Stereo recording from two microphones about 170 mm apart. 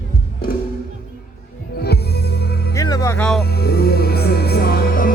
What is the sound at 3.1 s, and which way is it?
Speech, 5° left (ahead or behind).